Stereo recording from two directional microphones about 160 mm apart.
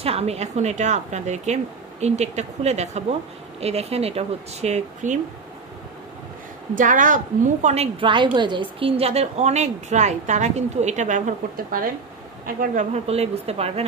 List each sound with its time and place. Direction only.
0.0 s a woman's voice: 40° right (ahead or behind)
6.8 s a woman's voice: 55° right (ahead or behind)
12.9 s speech: 40° right (ahead or behind)